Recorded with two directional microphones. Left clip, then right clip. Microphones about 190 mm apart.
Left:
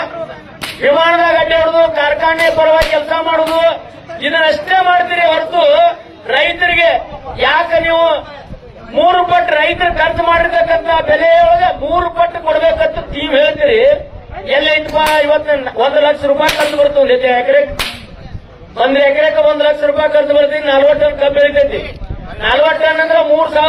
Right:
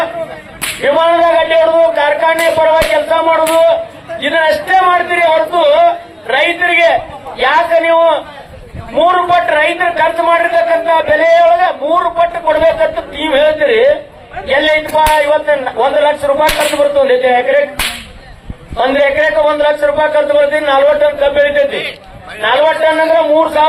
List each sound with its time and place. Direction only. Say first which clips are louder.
0.9 s a man's voice: even; 25° right (ahead or behind)
18.8 s a man's voice: even; 25° right (ahead or behind)